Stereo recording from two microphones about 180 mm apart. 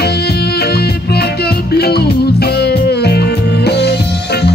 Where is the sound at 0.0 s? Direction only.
65° left (ahead or behind).